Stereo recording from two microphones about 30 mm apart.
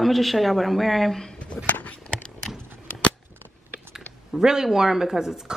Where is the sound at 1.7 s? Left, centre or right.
Left.